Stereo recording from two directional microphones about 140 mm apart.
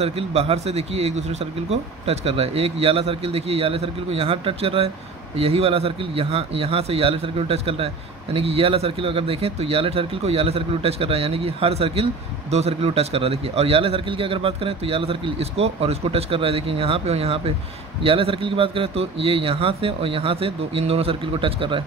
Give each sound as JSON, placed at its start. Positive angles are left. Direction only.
{"t": 0.0, "sound": "a man's voice", "side_deg": -45}